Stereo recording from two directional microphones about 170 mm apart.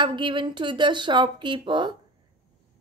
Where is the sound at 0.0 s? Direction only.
30° right (ahead or behind).